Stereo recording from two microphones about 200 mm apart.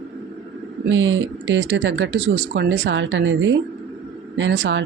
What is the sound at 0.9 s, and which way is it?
Speech, 70° right (ahead or behind).